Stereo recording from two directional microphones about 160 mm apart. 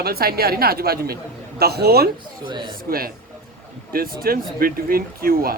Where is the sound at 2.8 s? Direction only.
65° right (ahead or behind).